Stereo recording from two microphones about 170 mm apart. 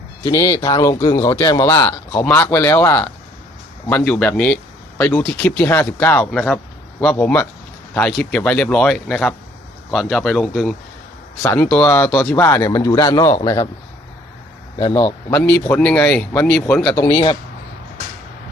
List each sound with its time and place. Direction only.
0.2 s speech: 20° left (ahead or behind); by 10.8 s centre (ahead or behind)
11.4 s speech: 10° left (ahead or behind)
14.8 s speech: 25° left (ahead or behind)
15.3 s speech: 10° left (ahead or behind)
17.1 s speech: 35° left (ahead or behind)